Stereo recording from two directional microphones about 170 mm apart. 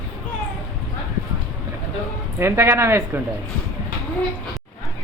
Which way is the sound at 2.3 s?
15° right (ahead or behind).